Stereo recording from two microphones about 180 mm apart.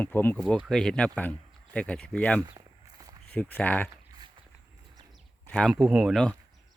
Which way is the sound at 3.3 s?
5° left (ahead or behind).